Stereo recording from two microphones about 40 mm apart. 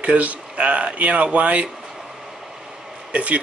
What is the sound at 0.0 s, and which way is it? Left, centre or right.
Speech, right.